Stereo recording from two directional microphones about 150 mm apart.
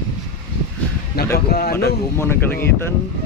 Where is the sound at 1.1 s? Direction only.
90° left.